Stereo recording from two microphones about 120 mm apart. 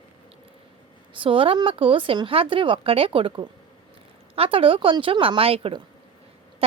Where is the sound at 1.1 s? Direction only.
45° right (ahead or behind).